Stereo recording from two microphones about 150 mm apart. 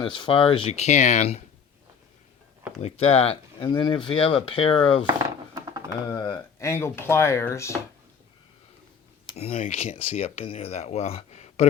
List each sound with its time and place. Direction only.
0.0 s speech: 35° left (ahead or behind); by 1.4 s 50° left (ahead or behind)
2.8 s speech: 40° left (ahead or behind)
6.1 s speech: 30° left (ahead or behind)
9.3 s speech: 45° left (ahead or behind)